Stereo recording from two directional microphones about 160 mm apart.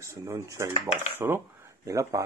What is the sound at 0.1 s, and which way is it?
Speech, 20° right (ahead or behind).